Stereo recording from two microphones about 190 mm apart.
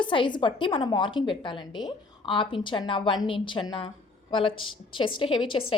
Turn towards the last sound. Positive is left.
turn(degrees=30)  # may be behind; listen again after turning